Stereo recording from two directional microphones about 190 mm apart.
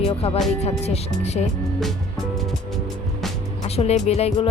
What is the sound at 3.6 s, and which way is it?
Speech, 35° left (ahead or behind).